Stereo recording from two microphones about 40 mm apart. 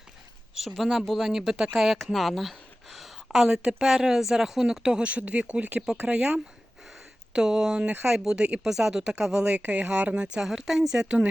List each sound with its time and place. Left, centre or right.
0.6 s speech: centre
1.7 s speech: centre
2.1 s a sound: centre
3.5 s speech: right
4.8 s speech: right
7.3 s a woman's voice: centre
8.6 s speech: centre
9.6 s speech: right
10.2 s speech: centre